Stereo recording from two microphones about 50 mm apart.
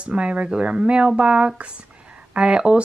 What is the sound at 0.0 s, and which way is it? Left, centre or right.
Speech, right.